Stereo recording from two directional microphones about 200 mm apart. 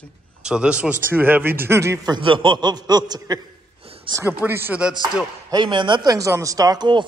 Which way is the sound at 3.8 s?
30° right (ahead or behind).